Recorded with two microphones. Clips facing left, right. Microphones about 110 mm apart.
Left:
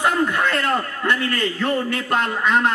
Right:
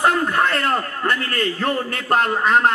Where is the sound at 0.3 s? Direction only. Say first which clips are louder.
Right 1 dB; 40° right (ahead or behind).